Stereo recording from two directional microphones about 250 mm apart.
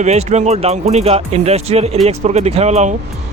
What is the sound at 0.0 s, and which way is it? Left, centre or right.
Speech, right.